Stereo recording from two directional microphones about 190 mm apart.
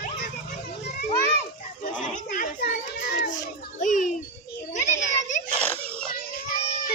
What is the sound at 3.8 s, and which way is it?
Music, 40° left (ahead or behind).